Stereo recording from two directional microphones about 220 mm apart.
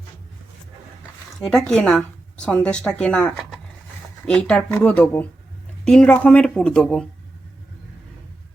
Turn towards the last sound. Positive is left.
turn(degrees=0)  # may be behind; listen again after turning